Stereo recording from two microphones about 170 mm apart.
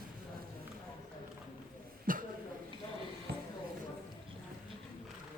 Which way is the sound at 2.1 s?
55° right (ahead or behind).